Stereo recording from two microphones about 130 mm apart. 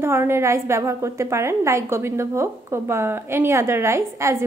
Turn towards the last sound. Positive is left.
turn(degrees=-20)  # may be behind; listen again after turning